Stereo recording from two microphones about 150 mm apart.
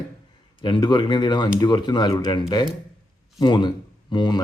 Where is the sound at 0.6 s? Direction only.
30° left (ahead or behind).